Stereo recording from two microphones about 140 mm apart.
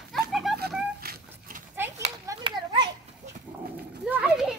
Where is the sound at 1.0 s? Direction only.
90° right.